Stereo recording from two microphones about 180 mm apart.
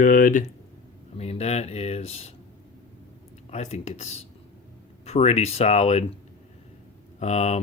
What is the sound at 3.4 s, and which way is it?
Speech, 40° left (ahead or behind).